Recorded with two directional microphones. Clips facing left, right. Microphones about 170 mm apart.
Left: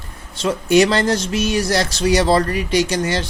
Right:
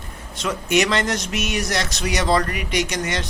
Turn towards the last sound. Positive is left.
turn(degrees=30)  # may be behind; listen again after turning